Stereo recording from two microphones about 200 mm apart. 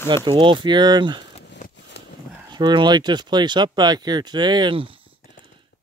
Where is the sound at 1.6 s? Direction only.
40° left (ahead or behind).